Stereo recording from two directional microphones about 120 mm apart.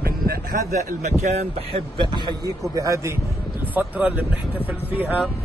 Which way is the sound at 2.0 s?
40° right (ahead or behind).